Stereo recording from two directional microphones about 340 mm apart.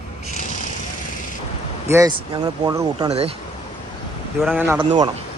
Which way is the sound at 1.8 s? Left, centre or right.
Centre.